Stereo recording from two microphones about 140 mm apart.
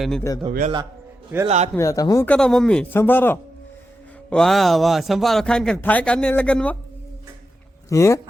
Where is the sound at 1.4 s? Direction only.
50° right (ahead or behind).